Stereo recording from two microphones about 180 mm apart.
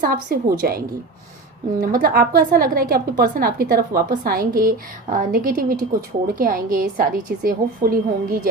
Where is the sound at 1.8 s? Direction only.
50° right (ahead or behind).